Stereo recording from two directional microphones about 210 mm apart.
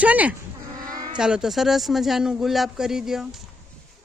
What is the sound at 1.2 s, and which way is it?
Speech, 5° right (ahead or behind).